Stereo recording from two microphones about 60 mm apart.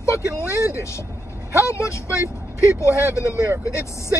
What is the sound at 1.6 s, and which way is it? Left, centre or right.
Speech, left.